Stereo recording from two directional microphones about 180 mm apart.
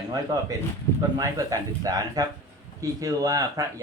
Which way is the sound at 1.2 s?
20° right (ahead or behind).